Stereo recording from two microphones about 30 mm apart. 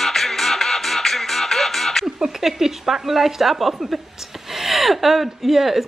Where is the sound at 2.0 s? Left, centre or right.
Centre.